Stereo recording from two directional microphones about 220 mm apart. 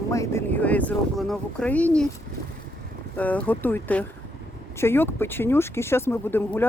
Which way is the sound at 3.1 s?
5° left (ahead or behind).